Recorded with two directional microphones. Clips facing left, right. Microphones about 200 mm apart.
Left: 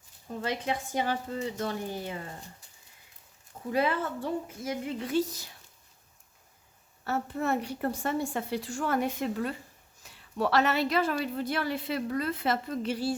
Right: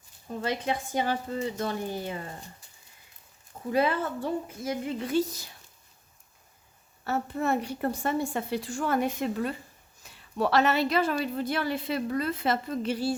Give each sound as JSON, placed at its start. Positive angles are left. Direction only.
{"t": 0.4, "sound": "speech", "side_deg": -30}
{"t": 3.7, "sound": "speech", "side_deg": -35}
{"t": 7.0, "sound": "a woman's voice", "side_deg": -20}